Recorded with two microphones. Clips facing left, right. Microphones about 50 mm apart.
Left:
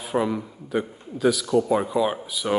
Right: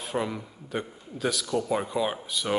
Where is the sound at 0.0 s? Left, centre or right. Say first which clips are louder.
Left 6 dB; centre.